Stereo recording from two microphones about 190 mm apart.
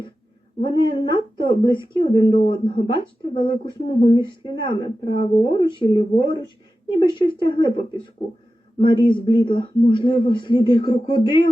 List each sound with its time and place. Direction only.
0.6 s speech: 25° left (ahead or behind)